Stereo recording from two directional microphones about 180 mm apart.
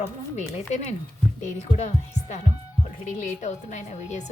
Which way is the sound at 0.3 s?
40° left (ahead or behind).